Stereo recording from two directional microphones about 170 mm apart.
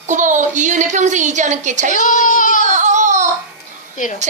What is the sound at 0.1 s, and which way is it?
A woman's voice, 45° right (ahead or behind).